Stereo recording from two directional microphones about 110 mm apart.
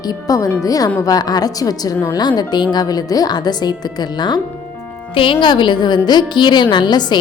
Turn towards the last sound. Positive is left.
turn(degrees=40)  # may be behind; listen again after turning